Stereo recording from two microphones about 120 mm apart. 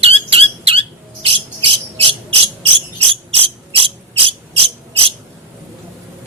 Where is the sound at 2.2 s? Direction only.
50° right (ahead or behind).